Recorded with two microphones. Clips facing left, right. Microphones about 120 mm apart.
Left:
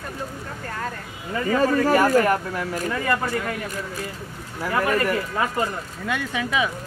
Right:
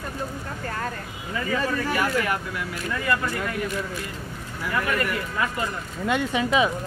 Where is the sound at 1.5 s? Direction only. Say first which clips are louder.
Left 8 dB; 45° left (ahead or behind).